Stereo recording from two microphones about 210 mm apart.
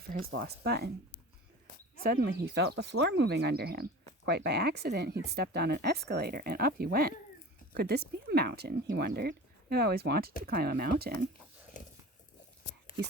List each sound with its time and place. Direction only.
0.3 s speech: 50° right (ahead or behind)
2.0 s speech: 45° right (ahead or behind)